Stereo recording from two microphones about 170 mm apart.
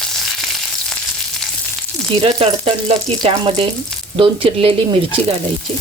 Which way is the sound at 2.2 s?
35° right (ahead or behind).